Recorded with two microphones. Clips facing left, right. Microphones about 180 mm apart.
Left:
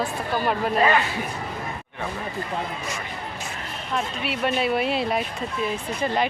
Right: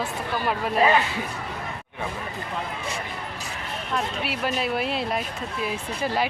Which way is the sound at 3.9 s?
Centre (ahead or behind).